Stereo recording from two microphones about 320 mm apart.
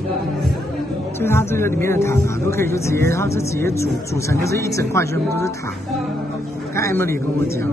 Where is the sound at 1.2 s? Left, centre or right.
Centre.